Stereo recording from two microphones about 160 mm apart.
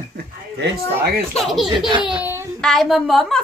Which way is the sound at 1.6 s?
30° right (ahead or behind).